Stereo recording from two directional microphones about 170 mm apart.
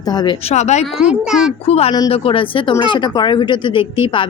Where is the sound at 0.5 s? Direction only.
40° left (ahead or behind).